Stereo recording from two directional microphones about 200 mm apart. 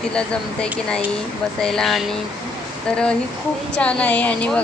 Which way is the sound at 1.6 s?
Centre (ahead or behind).